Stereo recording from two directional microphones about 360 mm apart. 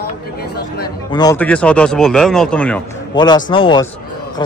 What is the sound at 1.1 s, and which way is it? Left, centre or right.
A man's voice, centre.